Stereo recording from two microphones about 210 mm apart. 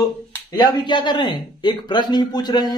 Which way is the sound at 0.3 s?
20° left (ahead or behind).